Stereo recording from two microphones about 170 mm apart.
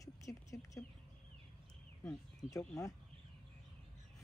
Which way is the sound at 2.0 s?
5° left (ahead or behind).